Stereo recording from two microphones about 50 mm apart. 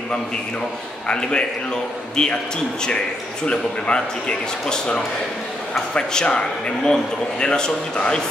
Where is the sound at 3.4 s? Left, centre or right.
Centre.